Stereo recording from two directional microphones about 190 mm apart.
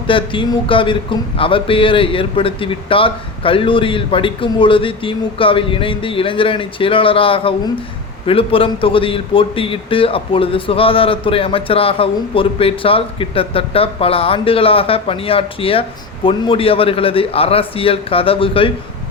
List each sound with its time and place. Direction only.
0.1 s a man's voice: 25° left (ahead or behind)